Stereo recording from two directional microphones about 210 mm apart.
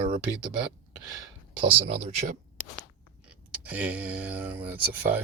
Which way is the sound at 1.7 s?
30° right (ahead or behind).